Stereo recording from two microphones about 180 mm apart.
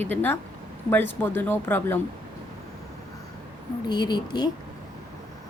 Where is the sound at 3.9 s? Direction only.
25° left (ahead or behind).